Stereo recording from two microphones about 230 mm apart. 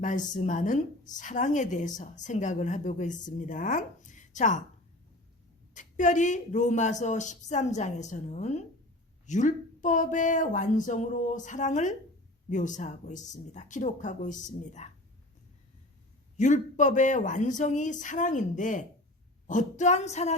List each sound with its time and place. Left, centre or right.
0.3 s speech: left
5.7 s speech: left
16.4 s speech: left
19.5 s a sound: left